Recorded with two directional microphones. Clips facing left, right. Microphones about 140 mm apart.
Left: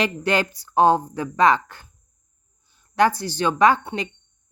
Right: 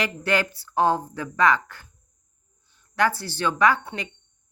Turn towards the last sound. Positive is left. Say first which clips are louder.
# left 4 dB
turn(degrees=25)  # may be behind; listen again after turning